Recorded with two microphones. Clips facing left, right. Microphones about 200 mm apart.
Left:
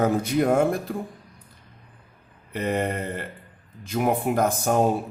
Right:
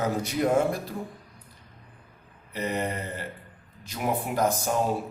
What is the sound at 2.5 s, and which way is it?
A man's voice, 50° left (ahead or behind).